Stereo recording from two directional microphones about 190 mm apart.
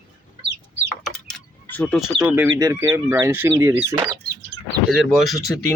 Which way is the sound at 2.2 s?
10° right (ahead or behind).